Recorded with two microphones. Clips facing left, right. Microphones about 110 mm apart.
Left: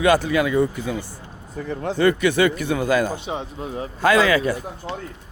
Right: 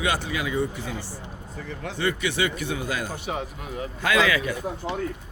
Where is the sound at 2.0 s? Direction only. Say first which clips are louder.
Left 8 dB; 50° left (ahead or behind).